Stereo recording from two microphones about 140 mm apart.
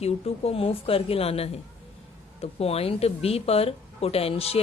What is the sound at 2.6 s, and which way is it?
A woman's voice, 45° left (ahead or behind).